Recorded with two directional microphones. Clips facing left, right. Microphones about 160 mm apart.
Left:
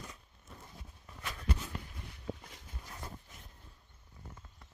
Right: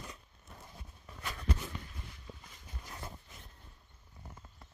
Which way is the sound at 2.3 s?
70° left (ahead or behind).